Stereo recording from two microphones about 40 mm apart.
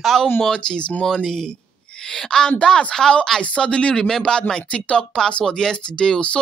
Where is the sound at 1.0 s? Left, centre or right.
Centre.